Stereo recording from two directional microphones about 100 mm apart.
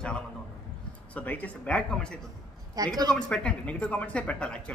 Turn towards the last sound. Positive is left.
turn(degrees=10)  # may be behind; listen again after turning